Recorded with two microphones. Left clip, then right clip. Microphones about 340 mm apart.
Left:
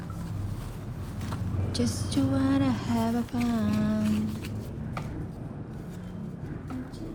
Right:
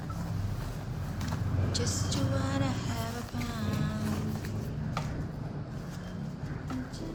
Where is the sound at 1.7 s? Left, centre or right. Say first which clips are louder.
Left 4 dB; centre.